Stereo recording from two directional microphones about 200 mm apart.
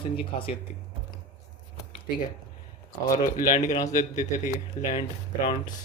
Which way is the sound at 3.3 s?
40° left (ahead or behind).